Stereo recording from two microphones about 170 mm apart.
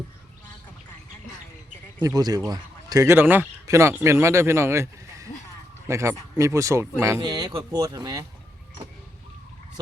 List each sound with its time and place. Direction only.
2.0 s speech: 25° right (ahead or behind)